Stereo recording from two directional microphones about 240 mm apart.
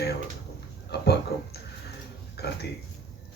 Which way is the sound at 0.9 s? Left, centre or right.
Left.